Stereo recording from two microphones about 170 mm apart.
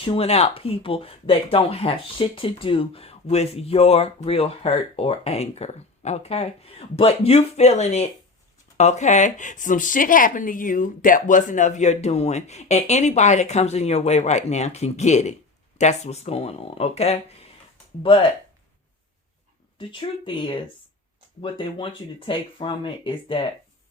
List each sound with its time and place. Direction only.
0.0 s speech: 35° left (ahead or behind)
19.9 s speech: 30° left (ahead or behind)